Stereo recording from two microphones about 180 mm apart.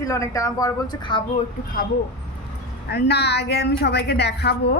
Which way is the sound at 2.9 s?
65° left (ahead or behind).